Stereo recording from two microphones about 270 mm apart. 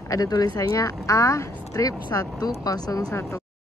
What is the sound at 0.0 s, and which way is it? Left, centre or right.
Speech, centre.